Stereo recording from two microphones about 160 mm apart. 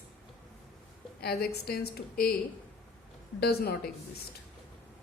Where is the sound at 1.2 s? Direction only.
80° left.